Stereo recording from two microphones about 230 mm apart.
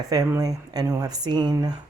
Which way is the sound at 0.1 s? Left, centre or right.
Centre.